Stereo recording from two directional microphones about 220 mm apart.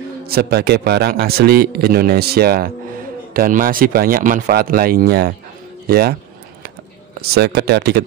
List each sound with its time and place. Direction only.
0.3 s a man's voice: 45° right (ahead or behind)
7.2 s a man's voice: 45° right (ahead or behind)